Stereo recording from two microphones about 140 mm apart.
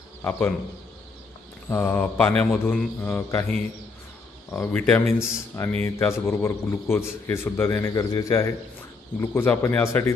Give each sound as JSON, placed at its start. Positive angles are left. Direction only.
{"t": 0.2, "sound": "speech", "side_deg": 15}
{"t": 1.7, "sound": "a man's voice", "side_deg": 15}